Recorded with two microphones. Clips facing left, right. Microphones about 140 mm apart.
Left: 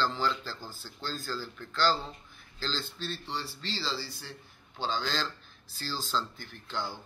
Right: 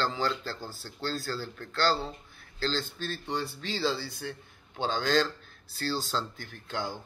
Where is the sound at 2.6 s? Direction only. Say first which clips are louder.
Right 5 dB; 50° right (ahead or behind).